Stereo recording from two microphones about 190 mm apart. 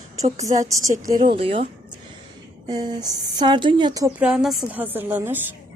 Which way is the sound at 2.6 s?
20° right (ahead or behind).